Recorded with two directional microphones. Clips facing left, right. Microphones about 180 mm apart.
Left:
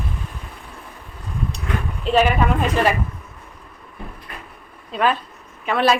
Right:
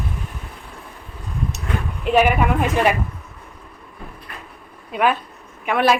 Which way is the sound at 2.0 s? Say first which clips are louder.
Right 1 dB; 15° right (ahead or behind).